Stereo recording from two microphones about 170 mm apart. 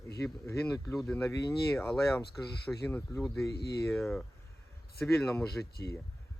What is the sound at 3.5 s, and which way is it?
Speech, 75° left (ahead or behind).